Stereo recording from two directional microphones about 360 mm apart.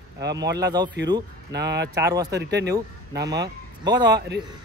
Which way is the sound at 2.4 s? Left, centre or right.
Right.